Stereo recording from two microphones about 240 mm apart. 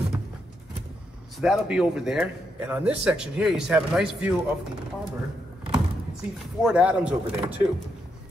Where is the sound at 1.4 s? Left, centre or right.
Centre.